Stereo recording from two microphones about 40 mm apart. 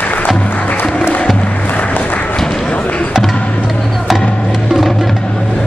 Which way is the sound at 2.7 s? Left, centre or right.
Left.